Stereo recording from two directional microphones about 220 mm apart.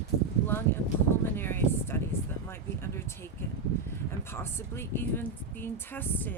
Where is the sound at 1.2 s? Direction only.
10° left (ahead or behind).